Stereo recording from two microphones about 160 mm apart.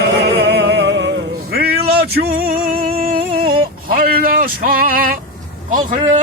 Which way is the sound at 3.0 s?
65° right (ahead or behind).